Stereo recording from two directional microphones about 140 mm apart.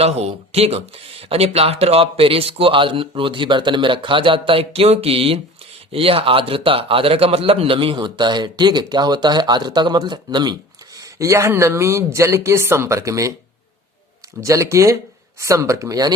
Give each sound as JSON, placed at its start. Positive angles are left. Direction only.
{"t": 0.0, "sound": "a man's voice", "side_deg": -50}
{"t": 14.4, "sound": "speech", "side_deg": -20}